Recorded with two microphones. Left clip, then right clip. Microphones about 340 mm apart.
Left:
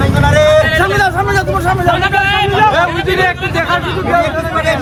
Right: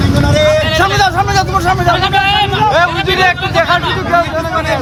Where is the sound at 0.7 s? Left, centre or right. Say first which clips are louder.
Right 1 dB; centre.